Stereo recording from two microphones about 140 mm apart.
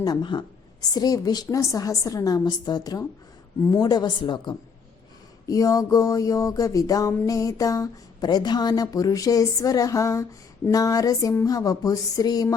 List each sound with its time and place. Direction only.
0.0 s a woman's voice: 30° left (ahead or behind)
5.5 s a woman's voice: 25° left (ahead or behind)